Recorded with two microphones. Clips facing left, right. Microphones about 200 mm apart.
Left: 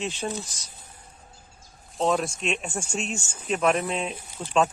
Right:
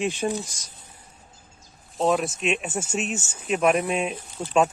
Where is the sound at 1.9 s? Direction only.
Centre (ahead or behind).